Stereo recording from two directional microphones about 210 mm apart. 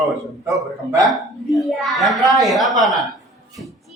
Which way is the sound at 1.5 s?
Centre (ahead or behind).